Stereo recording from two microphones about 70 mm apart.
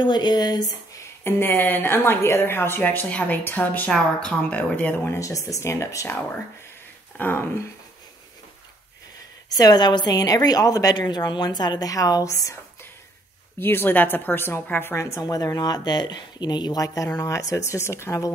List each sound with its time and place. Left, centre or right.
0.0 s speech: left
1.2 s a woman's voice: left
3.9 s speech: centre
5.0 s a woman's voice: left
7.2 s a woman's voice: left
9.6 s a woman's voice: left
13.6 s a woman's voice: left
15.2 s speech: left
16.8 s speech: left